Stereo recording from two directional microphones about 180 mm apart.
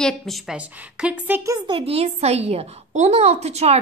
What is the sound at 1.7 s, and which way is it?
A woman's voice, 30° right (ahead or behind).